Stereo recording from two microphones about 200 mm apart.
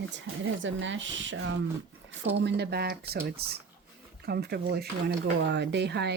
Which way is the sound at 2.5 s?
55° right (ahead or behind).